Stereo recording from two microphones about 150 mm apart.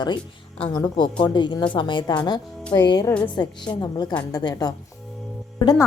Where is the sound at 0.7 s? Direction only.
30° left (ahead or behind).